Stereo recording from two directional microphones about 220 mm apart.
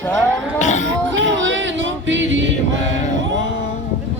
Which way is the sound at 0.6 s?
35° left (ahead or behind).